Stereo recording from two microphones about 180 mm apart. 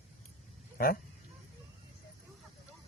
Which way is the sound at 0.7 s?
55° left (ahead or behind).